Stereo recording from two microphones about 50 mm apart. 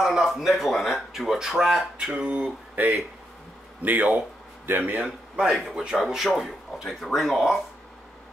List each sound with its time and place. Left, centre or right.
0.0 s speech: centre
2.1 s speech: right
2.7 s speech: right
5.4 s speech: centre